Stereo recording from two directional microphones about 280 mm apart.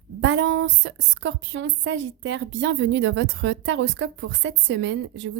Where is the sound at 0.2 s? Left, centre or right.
Right.